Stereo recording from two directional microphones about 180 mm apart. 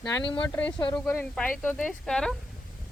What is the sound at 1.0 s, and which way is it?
Speech, 5° left (ahead or behind).